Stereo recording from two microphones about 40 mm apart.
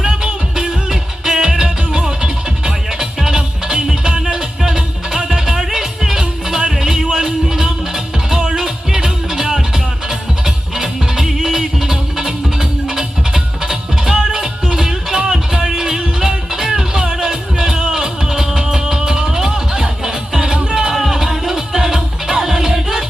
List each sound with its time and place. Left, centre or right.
0.0 s music: centre
20.9 s music: centre